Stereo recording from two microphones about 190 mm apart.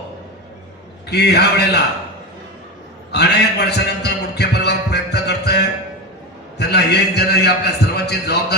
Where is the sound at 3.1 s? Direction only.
60° left (ahead or behind).